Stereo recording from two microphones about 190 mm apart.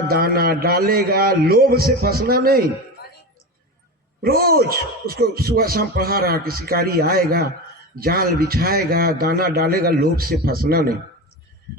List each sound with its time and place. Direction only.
0.1 s speech: 50° right (ahead or behind)
4.2 s speech: 55° right (ahead or behind)